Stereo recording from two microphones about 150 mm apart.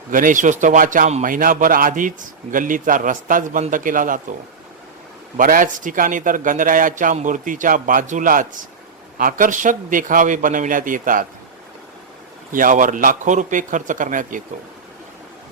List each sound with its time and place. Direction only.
0.1 s a man's voice: 60° right (ahead or behind)
5.4 s a man's voice: 65° right (ahead or behind)
12.5 s a man's voice: 65° right (ahead or behind)